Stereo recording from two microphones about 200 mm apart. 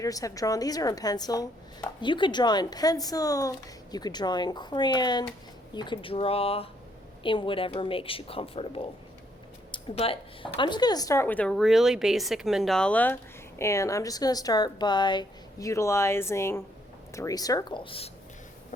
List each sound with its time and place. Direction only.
0.0 s a woman's voice: 15° left (ahead or behind)